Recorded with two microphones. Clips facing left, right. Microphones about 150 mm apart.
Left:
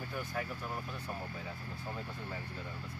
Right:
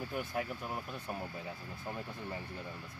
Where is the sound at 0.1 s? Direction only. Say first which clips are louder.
Right 1 dB; 20° right (ahead or behind).